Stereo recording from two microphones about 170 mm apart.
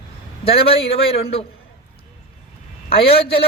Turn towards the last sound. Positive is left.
turn(degrees=35)  # may be behind; listen again after turning